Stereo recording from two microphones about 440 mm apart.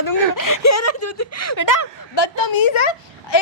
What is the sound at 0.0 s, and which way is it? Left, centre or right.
Speech, left.